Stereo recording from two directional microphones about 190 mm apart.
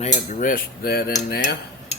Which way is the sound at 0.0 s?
40° left (ahead or behind).